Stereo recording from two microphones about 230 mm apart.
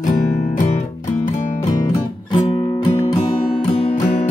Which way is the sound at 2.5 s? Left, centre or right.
Left.